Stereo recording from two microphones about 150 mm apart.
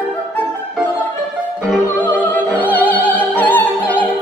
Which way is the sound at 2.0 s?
15° left (ahead or behind).